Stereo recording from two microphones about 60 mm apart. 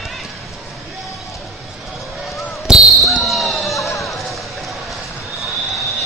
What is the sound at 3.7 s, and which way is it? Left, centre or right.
Run, left.